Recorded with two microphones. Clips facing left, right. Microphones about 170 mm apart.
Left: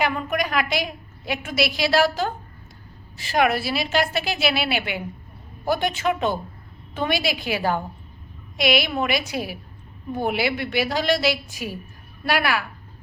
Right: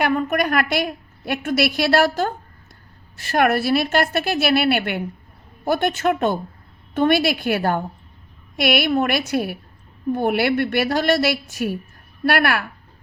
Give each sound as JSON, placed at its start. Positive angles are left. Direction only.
{"t": 0.0, "sound": "a woman's voice", "side_deg": -55}